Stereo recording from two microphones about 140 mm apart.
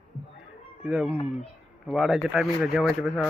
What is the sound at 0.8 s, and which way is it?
Speech, centre (ahead or behind).